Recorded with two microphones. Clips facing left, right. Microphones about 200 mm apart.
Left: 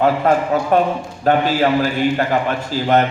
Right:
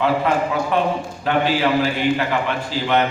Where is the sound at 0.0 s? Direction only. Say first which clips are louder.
Left 3 dB; 45° left (ahead or behind).